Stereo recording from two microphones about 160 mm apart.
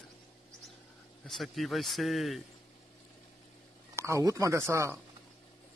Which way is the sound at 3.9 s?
20° right (ahead or behind).